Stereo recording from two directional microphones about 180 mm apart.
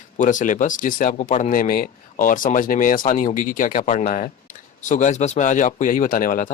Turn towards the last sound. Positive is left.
turn(degrees=50)  # may be behind; listen again after turning